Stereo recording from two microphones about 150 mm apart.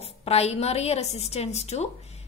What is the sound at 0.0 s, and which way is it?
A woman's voice, 45° left (ahead or behind).